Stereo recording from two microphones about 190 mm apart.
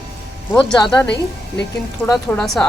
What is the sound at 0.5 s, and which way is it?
A woman's voice, 5° left (ahead or behind).